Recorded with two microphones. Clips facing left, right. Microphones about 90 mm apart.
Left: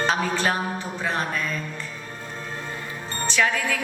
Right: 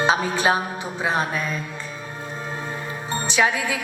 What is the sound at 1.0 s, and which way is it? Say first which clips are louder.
Speech: right 4 dB; 15° right (ahead or behind).